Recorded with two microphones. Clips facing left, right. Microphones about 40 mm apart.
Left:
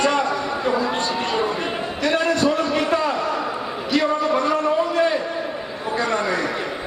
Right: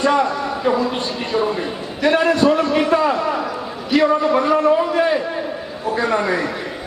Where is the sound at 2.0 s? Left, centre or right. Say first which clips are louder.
Right 5 dB; centre.